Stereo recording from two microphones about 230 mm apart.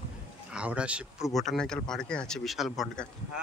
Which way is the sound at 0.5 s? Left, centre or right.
Centre.